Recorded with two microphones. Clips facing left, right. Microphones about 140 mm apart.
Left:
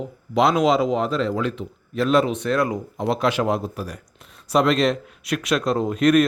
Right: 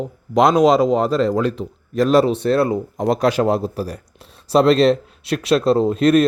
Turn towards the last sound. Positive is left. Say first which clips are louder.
# right 3 dB
turn(degrees=-30)  # may be behind; listen again after turning